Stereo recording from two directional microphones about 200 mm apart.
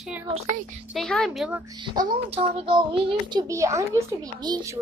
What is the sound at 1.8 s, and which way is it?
A child's voice, 25° right (ahead or behind).